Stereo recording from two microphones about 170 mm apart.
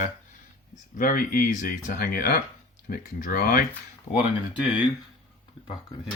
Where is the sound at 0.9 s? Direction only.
55° left (ahead or behind).